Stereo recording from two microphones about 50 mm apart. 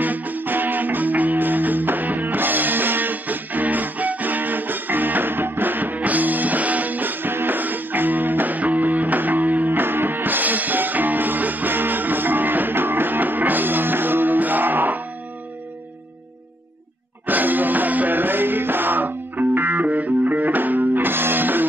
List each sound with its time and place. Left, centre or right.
0.0 s music: right
17.3 s music: right